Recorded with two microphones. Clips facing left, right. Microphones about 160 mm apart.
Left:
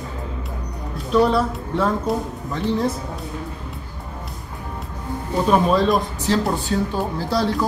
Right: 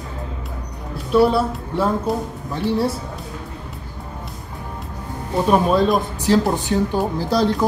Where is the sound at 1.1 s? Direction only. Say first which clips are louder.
Right 2 dB; 5° right (ahead or behind).